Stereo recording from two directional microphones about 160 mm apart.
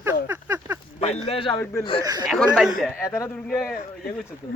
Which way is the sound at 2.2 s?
Centre (ahead or behind).